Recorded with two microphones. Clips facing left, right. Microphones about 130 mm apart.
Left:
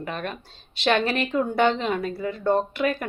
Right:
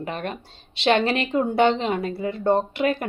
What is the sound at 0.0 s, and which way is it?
Speech, 20° right (ahead or behind).